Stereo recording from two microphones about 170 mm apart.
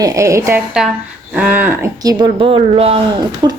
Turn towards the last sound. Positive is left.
turn(degrees=-25)  # may be behind; listen again after turning